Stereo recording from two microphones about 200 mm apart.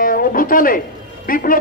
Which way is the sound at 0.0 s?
45° left (ahead or behind).